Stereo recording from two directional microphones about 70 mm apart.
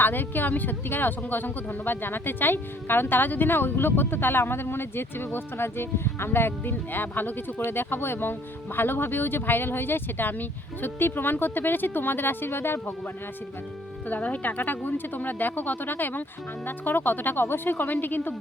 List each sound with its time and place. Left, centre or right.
0.0 s speech: left
14.1 s speech: left